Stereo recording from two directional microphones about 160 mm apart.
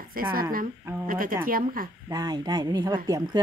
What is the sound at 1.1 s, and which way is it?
Speech, 60° right (ahead or behind).